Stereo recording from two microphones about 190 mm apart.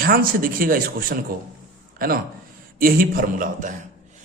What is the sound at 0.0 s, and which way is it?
A man's voice, 50° right (ahead or behind).